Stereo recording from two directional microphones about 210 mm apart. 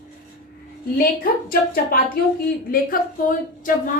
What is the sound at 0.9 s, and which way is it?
A woman's voice, 45° left (ahead or behind).